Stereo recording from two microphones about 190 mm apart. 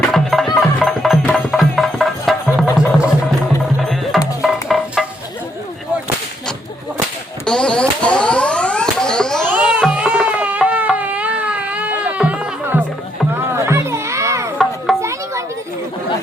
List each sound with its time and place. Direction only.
0.1 s music: centre (ahead or behind)
4.4 s music: centre (ahead or behind)
7.4 s a sound: 5° left (ahead or behind)
9.5 s music: 10° right (ahead or behind)
9.8 s baby cry: 5° right (ahead or behind)
13.5 s music: 15° right (ahead or behind)
14.9 s a sound: centre (ahead or behind)